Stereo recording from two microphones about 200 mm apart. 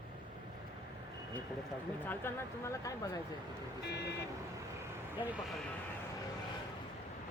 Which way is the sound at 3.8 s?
55° left (ahead or behind).